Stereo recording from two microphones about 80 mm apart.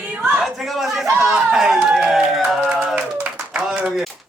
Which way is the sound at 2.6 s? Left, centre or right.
Centre.